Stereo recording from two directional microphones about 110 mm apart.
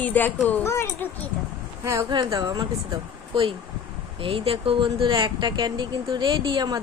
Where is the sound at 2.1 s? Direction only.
40° right (ahead or behind).